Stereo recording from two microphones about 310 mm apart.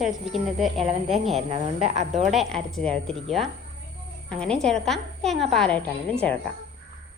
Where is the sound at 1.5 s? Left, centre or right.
Right.